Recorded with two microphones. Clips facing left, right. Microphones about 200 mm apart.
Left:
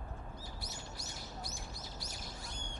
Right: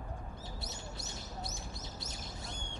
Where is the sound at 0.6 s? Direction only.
25° right (ahead or behind).